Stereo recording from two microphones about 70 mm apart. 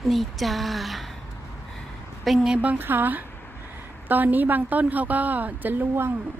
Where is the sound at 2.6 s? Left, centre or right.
Right.